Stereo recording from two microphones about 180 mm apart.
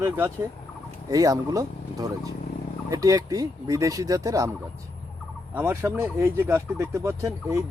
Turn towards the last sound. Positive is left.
turn(degrees=-15)  # may be behind; listen again after turning